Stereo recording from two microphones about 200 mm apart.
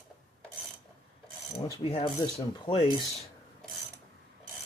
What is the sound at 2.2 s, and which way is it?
Speech, 20° left (ahead or behind).